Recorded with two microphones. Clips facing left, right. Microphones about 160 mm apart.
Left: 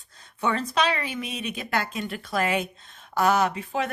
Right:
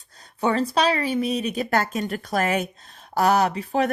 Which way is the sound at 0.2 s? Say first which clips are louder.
Right 5 dB; 35° right (ahead or behind).